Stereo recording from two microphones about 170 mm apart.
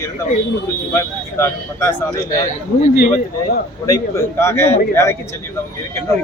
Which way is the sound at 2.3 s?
45° left (ahead or behind).